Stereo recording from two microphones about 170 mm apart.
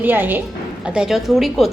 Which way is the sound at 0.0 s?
10° right (ahead or behind).